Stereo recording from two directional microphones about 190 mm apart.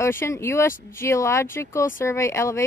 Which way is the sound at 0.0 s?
15° left (ahead or behind).